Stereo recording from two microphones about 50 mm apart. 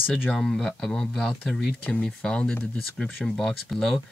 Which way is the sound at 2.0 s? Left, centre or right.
Centre.